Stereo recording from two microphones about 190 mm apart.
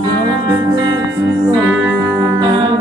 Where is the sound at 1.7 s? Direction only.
15° right (ahead or behind).